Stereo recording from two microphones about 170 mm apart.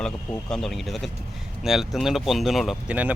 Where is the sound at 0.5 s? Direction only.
Centre (ahead or behind).